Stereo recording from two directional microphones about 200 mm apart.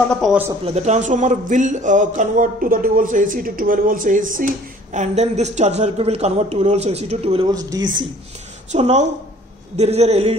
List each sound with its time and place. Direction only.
0.1 s speech: centre (ahead or behind)
0.7 s a man's voice: 35° right (ahead or behind)
7.4 s speech: 20° right (ahead or behind)
8.7 s a man's voice: 35° right (ahead or behind)